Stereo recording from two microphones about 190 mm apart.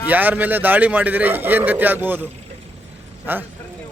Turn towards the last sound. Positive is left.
turn(degrees=-10)  # may be behind; listen again after turning